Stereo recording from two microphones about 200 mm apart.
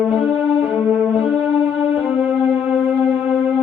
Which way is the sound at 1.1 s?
5° right (ahead or behind).